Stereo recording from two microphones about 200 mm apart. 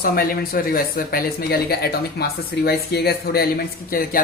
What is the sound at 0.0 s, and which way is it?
Speech, 50° left (ahead or behind).